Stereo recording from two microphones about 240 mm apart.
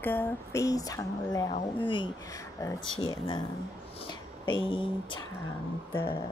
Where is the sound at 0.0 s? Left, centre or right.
Centre.